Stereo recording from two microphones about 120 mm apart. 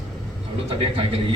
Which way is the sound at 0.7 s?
55° right (ahead or behind).